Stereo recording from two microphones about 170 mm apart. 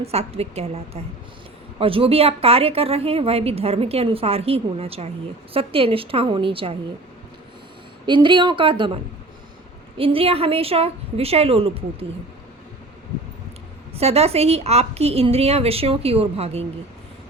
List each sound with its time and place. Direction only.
0.0 s a woman's voice: 35° right (ahead or behind)
1.8 s a woman's voice: 35° right (ahead or behind)
8.0 s a woman's voice: 30° right (ahead or behind)
10.0 s a woman's voice: 35° right (ahead or behind)
13.9 s a woman's voice: 35° right (ahead or behind)